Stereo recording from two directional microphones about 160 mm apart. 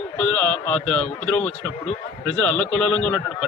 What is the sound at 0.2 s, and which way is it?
A man's voice, 5° left (ahead or behind).